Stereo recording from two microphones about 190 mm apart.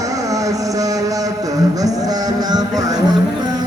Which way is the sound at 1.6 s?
20° right (ahead or behind).